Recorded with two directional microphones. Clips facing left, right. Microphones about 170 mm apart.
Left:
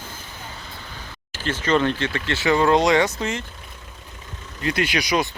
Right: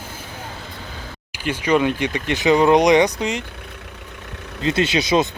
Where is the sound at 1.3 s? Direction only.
10° right (ahead or behind).